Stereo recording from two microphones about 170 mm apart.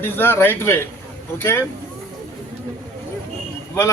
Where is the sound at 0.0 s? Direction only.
10° left (ahead or behind).